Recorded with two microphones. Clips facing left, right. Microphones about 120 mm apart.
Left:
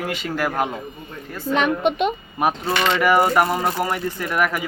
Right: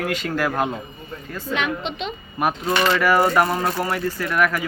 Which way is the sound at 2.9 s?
15° left (ahead or behind).